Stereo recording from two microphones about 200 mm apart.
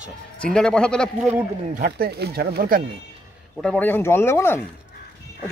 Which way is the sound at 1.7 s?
45° right (ahead or behind).